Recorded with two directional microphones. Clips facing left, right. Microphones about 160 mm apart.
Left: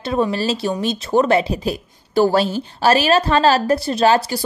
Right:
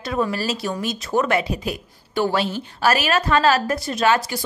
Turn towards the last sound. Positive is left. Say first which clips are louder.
# left 4 dB
turn(degrees=30)  # may be behind; listen again after turning